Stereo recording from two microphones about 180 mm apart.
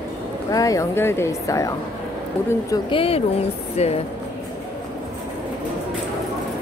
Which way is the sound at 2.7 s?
30° left (ahead or behind).